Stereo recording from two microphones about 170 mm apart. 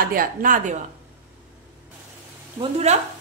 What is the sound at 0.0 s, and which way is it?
Speech, 55° right (ahead or behind).